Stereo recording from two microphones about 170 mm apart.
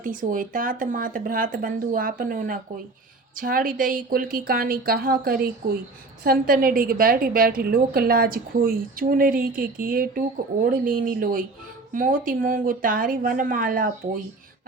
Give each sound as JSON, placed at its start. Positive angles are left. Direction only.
{"t": 0.0, "sound": "a woman's voice", "side_deg": -50}